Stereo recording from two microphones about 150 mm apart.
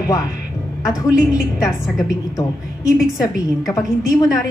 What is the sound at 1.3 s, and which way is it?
A woman's voice, 25° left (ahead or behind).